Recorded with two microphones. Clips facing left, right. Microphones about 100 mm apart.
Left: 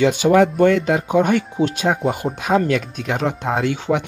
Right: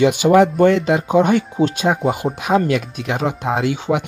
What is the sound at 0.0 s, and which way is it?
Speech, 15° right (ahead or behind).